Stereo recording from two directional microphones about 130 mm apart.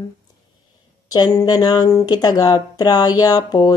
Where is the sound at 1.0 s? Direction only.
30° left (ahead or behind).